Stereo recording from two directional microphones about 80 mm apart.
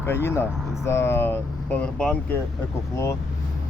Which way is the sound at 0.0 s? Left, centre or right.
Left.